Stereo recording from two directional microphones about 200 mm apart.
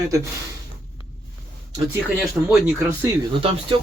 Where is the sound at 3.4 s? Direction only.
25° right (ahead or behind).